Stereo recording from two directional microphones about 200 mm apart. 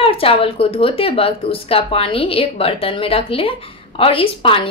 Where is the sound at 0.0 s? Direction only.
30° left (ahead or behind).